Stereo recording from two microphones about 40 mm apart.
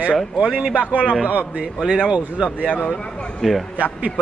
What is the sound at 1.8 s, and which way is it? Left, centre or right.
Speech, centre.